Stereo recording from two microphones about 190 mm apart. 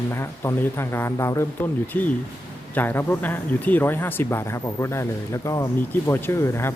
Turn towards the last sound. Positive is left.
turn(degrees=15)  # may be behind; listen again after turning